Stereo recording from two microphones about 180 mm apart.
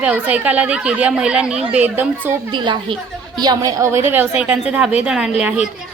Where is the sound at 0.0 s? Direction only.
10° right (ahead or behind).